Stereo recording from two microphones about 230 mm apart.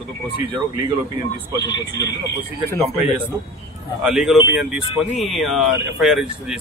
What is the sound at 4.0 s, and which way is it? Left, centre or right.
Speech, centre.